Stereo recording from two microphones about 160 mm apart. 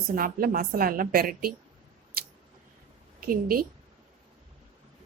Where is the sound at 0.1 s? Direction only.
65° right (ahead or behind).